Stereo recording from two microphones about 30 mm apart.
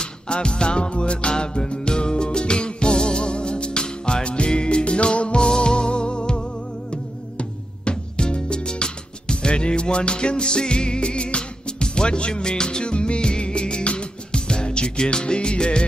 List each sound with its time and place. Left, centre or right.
0.0 s music: left
5.4 s music: left
12.8 s music: left